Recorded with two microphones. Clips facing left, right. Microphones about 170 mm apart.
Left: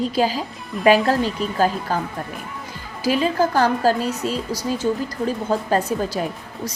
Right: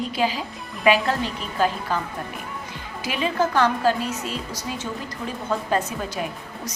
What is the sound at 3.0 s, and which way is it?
A woman's voice, 35° left (ahead or behind).